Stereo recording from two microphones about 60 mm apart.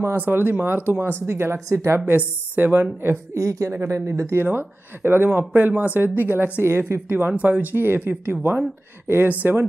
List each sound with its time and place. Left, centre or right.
0.0 s speech: right
1.2 s speech: right
2.0 s speech: right
3.3 s speech: right
3.7 s speech: right